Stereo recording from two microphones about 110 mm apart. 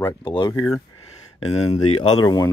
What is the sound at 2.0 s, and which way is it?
Speech, 40° left (ahead or behind).